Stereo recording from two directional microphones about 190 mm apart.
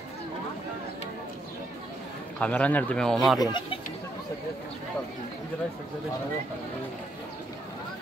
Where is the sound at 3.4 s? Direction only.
20° left (ahead or behind).